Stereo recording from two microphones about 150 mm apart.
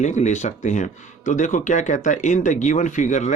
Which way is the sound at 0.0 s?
50° left (ahead or behind).